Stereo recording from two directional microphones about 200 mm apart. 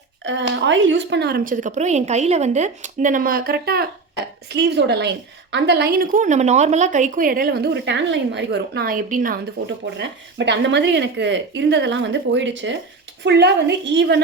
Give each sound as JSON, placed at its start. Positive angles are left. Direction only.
{"t": 0.3, "sound": "a woman's voice", "side_deg": -65}
{"t": 10.0, "sound": "a woman's voice", "side_deg": -60}